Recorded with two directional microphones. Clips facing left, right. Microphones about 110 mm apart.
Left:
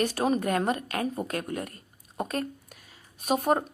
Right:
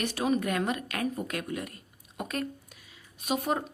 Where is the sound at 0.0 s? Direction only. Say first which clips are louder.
Left 3 dB; 40° left (ahead or behind).